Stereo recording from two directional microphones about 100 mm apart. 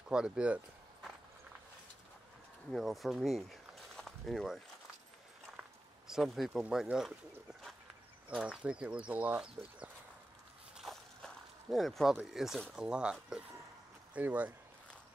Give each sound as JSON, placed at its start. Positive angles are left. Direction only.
{"t": 0.1, "sound": "speech", "side_deg": -10}
{"t": 2.7, "sound": "speech", "side_deg": 0}
{"t": 5.6, "sound": "speech", "side_deg": -5}
{"t": 8.4, "sound": "speech", "side_deg": -10}
{"t": 10.8, "sound": "a sound", "side_deg": 0}
{"t": 12.2, "sound": "speech", "side_deg": -5}